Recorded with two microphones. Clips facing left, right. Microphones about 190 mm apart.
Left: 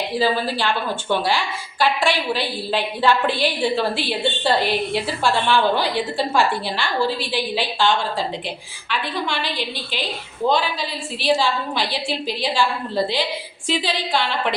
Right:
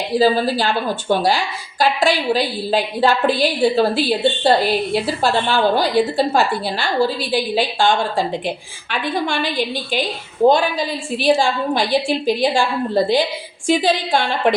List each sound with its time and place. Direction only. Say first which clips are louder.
0.2 s a woman's voice: right 6 dB; 40° right (ahead or behind)
13.7 s a woman's voice: right 6 dB; 50° right (ahead or behind)